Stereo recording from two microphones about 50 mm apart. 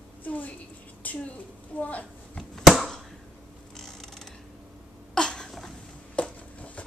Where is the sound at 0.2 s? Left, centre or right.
Left.